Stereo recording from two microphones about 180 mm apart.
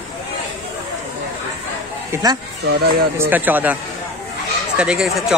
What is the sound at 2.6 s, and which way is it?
Speech, 60° right (ahead or behind).